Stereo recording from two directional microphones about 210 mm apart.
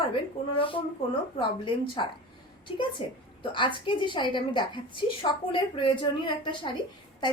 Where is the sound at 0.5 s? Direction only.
25° left (ahead or behind).